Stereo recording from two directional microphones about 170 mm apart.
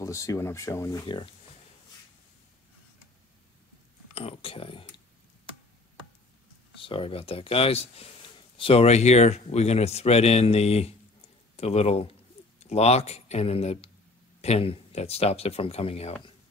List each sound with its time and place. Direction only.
0.0 s speech: 20° left (ahead or behind)
4.1 s speech: 35° left (ahead or behind)
6.8 s speech: 30° left (ahead or behind)